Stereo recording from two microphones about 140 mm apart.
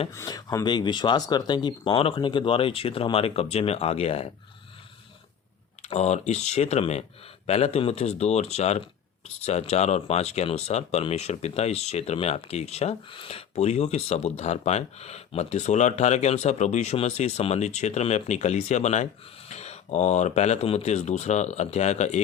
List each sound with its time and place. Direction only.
0.1 s speech: 25° left (ahead or behind); by 4.3 s 45° left (ahead or behind)
5.8 s speech: 50° left (ahead or behind)